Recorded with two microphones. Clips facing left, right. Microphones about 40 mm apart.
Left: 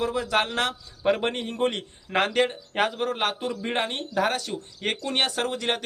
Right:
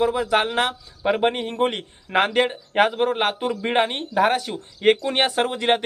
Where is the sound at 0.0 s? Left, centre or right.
Centre.